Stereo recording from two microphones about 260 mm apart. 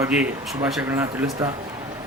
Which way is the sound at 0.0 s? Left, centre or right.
Centre.